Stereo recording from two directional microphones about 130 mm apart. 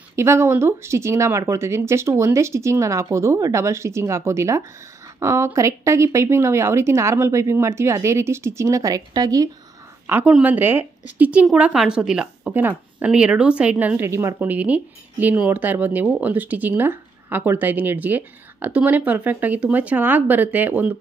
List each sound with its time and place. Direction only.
0.1 s speech: 20° right (ahead or behind)
10.0 s a woman's voice: 15° right (ahead or behind)